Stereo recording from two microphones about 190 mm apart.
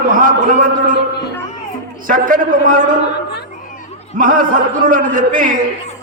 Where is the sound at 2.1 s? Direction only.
45° right (ahead or behind).